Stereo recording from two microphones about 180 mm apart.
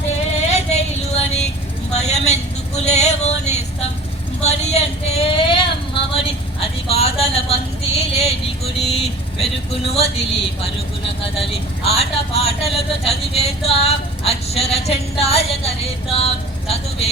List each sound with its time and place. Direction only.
0.1 s music: 35° left (ahead or behind)
1.9 s a sound: 35° left (ahead or behind)
7.9 s vehicle: 35° left (ahead or behind)
11.5 s music: 35° left (ahead or behind)